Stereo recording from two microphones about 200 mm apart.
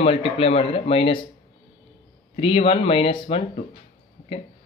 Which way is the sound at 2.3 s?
25° left (ahead or behind).